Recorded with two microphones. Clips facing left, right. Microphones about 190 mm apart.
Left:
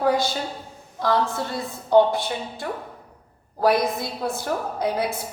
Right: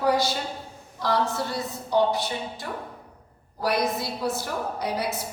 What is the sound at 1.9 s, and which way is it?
Speech, 55° left (ahead or behind).